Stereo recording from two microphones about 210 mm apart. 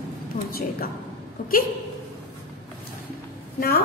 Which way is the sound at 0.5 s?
45° left (ahead or behind).